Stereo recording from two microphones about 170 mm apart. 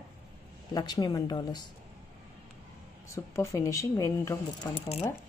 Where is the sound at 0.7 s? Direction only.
25° left (ahead or behind).